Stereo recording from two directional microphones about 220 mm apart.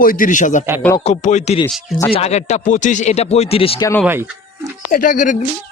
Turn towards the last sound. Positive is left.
turn(degrees=35)  # may be behind; listen again after turning